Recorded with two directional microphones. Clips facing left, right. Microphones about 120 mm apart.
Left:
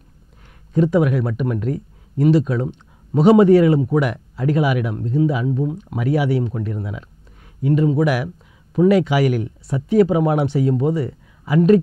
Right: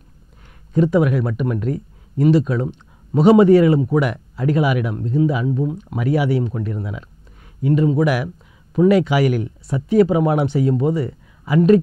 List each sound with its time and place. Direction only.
0.7 s speech: 15° right (ahead or behind)